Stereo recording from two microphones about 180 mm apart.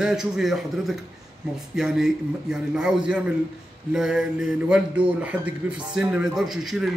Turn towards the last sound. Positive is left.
turn(degrees=0)  # may be behind; listen again after turning